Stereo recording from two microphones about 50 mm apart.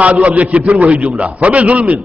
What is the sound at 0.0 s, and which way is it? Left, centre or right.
A man's voice, right.